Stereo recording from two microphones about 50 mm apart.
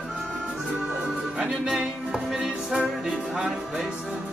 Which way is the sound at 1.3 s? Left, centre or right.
Centre.